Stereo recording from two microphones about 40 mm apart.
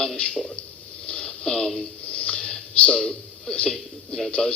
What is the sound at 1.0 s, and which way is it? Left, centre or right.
Radio, left.